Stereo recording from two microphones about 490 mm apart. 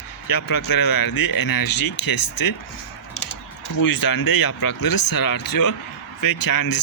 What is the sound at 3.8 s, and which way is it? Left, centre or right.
Speech, left.